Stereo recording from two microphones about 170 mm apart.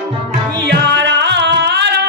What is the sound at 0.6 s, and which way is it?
Music, 90° right.